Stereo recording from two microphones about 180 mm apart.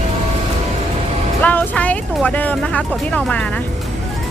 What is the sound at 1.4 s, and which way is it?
Speech, 10° left (ahead or behind).